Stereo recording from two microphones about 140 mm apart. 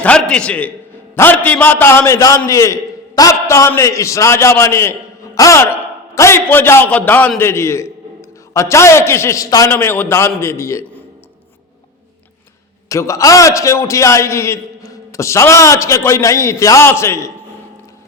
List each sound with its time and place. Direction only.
0.0 s a man's voice: 5° left (ahead or behind); by 9.7 s 25° left (ahead or behind)
9.7 s a man's voice: 15° left (ahead or behind)
12.9 s a man's voice: 20° left (ahead or behind)